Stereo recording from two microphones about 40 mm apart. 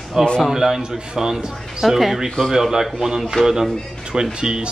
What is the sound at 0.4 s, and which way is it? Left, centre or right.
Speech, centre.